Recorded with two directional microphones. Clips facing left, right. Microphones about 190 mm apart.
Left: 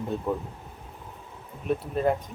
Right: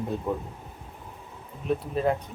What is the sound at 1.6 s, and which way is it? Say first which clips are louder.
Speech: even; centre (ahead or behind).